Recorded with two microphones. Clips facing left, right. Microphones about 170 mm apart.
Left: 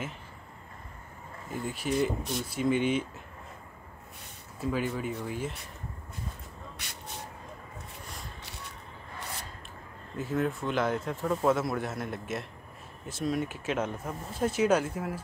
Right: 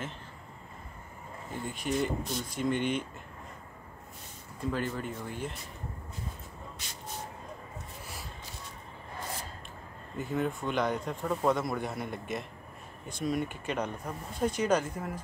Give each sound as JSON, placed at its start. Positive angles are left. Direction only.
{"t": 1.5, "sound": "speech", "side_deg": 5}
{"t": 4.6, "sound": "speech", "side_deg": 5}
{"t": 6.8, "sound": "vehicle", "side_deg": 65}
{"t": 10.1, "sound": "speech", "side_deg": 0}